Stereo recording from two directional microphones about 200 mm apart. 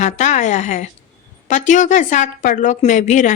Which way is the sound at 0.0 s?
35° left (ahead or behind).